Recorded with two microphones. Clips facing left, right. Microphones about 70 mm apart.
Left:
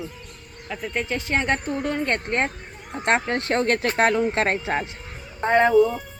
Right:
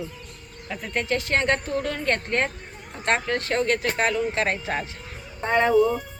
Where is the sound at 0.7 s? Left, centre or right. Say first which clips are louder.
Right 1 dB; centre; by 4.3 s left.